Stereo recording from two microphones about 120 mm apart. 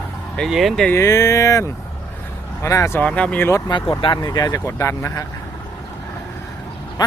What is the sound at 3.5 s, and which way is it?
Speech, 40° left (ahead or behind).